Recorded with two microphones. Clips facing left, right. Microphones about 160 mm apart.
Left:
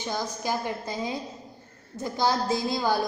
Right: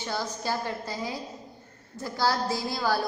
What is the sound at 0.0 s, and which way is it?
A woman's voice, 15° left (ahead or behind).